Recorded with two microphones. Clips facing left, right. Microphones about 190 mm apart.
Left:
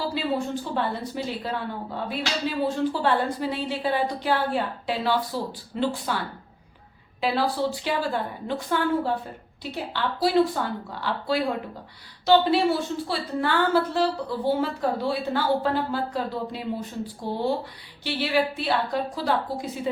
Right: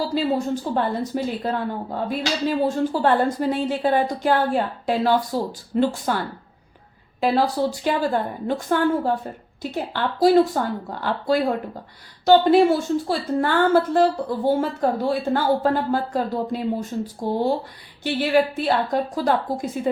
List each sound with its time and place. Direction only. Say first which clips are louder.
0.1 s a woman's voice: right 5 dB; 45° right (ahead or behind)
2.6 s a woman's voice: right 2 dB; 45° right (ahead or behind)